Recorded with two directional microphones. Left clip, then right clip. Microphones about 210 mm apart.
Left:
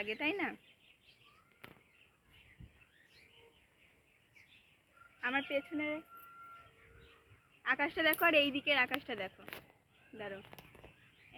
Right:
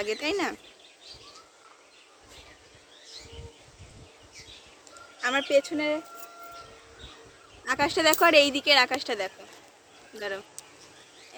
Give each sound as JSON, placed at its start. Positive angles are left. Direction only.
{"t": 0.0, "sound": "speech", "side_deg": -15}
{"t": 5.2, "sound": "speech", "side_deg": -15}
{"t": 7.6, "sound": "speech", "side_deg": -15}